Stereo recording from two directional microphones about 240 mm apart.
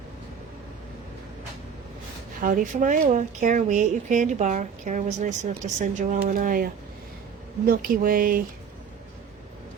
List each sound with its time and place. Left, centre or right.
2.4 s speech: right